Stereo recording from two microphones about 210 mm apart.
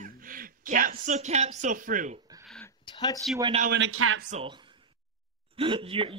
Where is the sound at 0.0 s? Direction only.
40° right (ahead or behind).